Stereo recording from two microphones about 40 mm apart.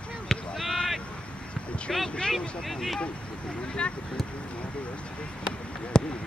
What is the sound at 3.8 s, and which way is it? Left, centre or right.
Speech, left.